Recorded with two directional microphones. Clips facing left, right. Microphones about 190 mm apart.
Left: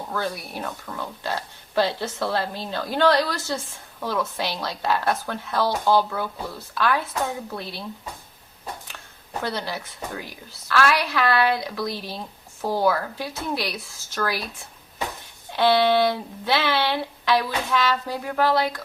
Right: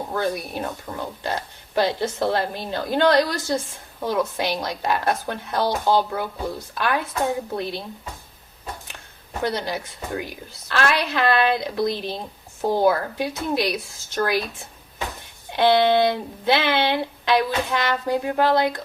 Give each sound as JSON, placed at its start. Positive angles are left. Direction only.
{"t": 0.1, "sound": "speech", "side_deg": -20}
{"t": 9.4, "sound": "speech", "side_deg": -15}